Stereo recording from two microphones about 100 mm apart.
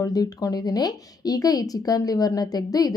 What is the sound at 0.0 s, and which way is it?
A woman's voice, 40° left (ahead or behind).